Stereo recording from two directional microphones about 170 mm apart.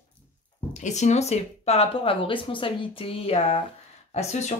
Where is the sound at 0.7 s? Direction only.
45° left (ahead or behind).